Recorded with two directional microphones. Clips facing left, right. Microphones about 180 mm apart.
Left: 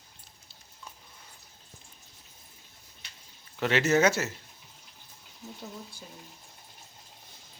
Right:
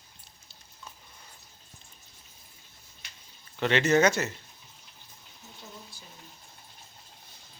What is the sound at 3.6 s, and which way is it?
Speech, 5° left (ahead or behind).